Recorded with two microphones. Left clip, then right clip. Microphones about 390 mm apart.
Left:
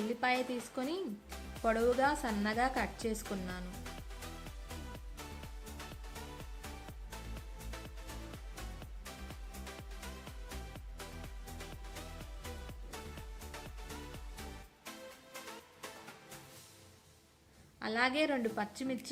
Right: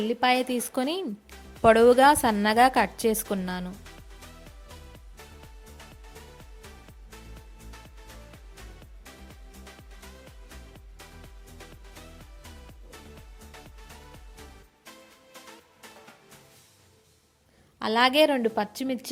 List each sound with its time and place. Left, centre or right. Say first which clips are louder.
0.1 s a woman's voice: right 10 dB; centre
4.4 s music: even; centre
9.3 s music: even; centre
12.9 s music: even; centre
17.7 s a woman's voice: right 12 dB; centre